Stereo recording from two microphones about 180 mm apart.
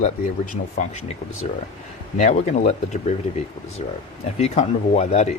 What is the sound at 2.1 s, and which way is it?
Speech, 40° left (ahead or behind).